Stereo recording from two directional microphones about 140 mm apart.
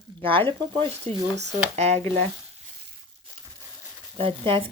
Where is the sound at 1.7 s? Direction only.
50° right (ahead or behind).